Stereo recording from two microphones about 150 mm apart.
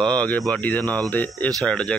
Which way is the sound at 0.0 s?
10° left (ahead or behind).